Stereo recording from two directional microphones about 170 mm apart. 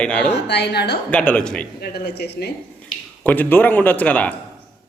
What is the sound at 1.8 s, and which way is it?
Speech, 70° left (ahead or behind).